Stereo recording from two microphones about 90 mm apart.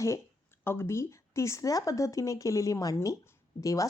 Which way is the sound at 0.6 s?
25° left (ahead or behind).